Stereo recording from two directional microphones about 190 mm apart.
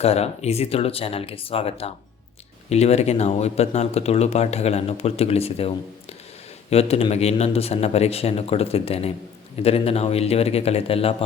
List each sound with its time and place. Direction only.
0.0 s speech: 35° left (ahead or behind)